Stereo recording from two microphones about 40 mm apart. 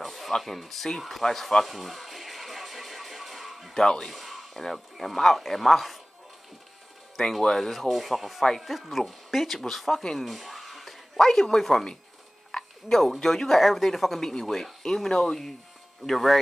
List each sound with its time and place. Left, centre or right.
0.0 s a sound: centre
3.7 s speech: centre
4.1 s speech: centre
7.4 s rub: centre
8.5 s speech: centre
12.5 s a sound: centre
13.2 s rub: centre
14.4 s speech: centre
16.1 s rub: centre